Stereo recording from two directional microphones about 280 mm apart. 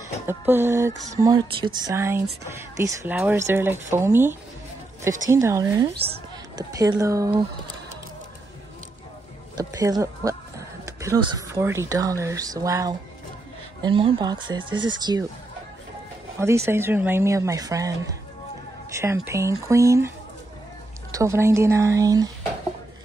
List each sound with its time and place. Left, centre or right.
0.3 s speech: centre
9.6 s speech: centre
16.3 s speech: centre
21.1 s speech: centre